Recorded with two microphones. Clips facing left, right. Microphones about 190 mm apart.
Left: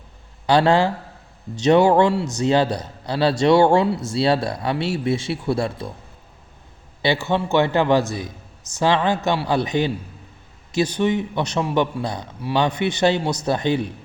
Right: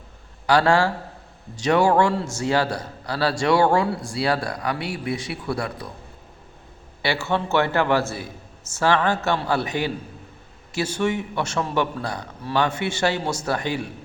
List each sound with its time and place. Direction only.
0.4 s a man's voice: 20° left (ahead or behind)
7.0 s a man's voice: 20° left (ahead or behind)